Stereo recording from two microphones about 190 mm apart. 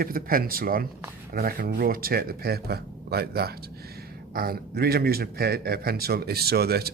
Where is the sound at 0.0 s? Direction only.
50° right (ahead or behind).